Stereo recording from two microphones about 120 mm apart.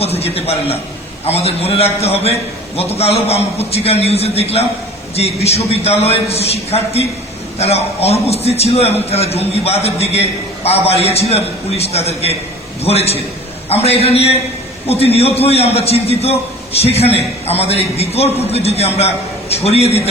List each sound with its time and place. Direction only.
0.0 s a man's voice: 55° left (ahead or behind)